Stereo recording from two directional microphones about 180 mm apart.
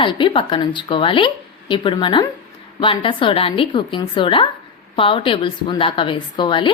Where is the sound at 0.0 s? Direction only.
25° left (ahead or behind).